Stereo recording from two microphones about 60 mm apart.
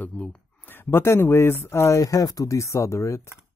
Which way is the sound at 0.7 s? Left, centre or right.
Left.